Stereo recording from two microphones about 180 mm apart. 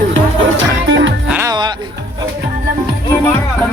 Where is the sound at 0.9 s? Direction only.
90° right.